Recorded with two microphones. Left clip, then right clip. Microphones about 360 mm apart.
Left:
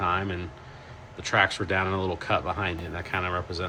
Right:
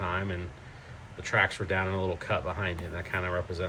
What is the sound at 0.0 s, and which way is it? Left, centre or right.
Vehicle, centre.